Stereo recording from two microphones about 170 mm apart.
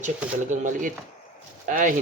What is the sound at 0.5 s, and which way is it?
Speech, 50° right (ahead or behind).